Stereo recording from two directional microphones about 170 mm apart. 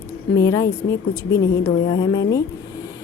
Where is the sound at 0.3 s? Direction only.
20° left (ahead or behind).